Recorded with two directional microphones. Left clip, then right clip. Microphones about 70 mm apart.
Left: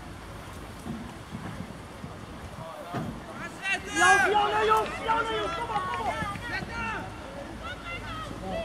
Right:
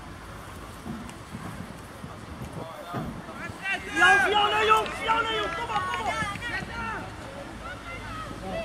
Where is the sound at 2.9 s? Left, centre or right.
Left.